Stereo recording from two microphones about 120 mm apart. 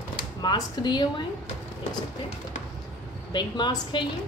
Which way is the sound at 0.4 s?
35° left (ahead or behind).